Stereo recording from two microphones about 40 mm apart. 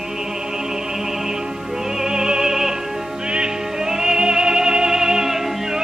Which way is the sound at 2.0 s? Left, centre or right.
Centre.